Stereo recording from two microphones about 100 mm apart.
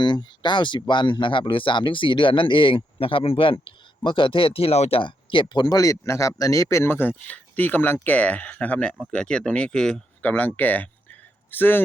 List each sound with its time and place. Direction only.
0.0 s speech: 50° left (ahead or behind); by 11.8 s 20° left (ahead or behind)